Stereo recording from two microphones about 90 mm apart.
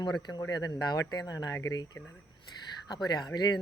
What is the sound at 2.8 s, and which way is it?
Speech, 50° left (ahead or behind).